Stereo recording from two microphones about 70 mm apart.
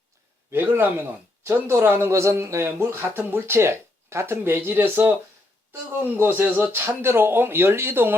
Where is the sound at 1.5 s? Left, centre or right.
Right.